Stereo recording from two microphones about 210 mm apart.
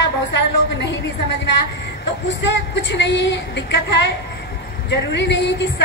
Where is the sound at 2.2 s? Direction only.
55° left (ahead or behind).